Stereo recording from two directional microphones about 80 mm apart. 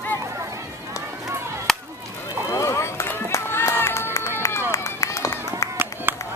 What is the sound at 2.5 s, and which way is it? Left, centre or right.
Run, left.